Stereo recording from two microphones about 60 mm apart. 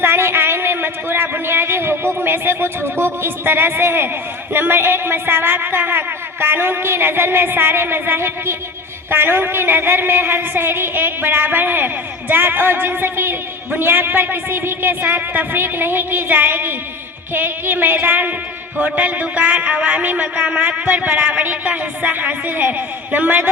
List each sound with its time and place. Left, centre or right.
0.0 s a woman's voice: right
18.9 s music: right